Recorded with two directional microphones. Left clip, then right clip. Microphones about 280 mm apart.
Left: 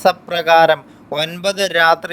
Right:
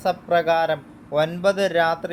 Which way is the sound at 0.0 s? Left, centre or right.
Left.